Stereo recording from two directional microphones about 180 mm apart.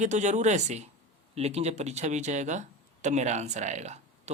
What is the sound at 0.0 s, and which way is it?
Speech, 40° right (ahead or behind).